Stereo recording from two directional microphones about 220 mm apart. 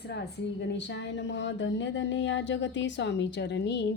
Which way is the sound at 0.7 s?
55° left (ahead or behind).